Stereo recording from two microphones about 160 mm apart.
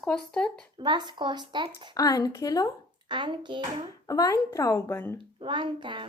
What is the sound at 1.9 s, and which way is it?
Speech, 20° left (ahead or behind).